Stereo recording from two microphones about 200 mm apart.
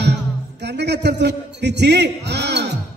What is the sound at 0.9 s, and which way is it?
A man's voice, 60° right (ahead or behind).